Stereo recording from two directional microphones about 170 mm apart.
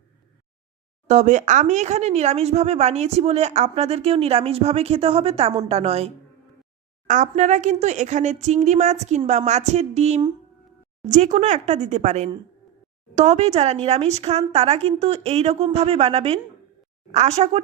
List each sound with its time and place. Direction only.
1.0 s speech: 45° right (ahead or behind)
7.1 s speech: 45° right (ahead or behind)